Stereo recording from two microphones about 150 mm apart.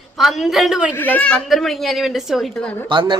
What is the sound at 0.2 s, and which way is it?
Speech, centre (ahead or behind).